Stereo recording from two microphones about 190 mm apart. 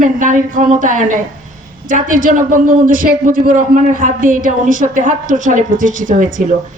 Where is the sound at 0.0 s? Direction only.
40° right (ahead or behind).